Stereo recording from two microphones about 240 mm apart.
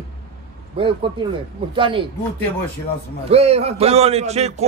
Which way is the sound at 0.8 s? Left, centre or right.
Right.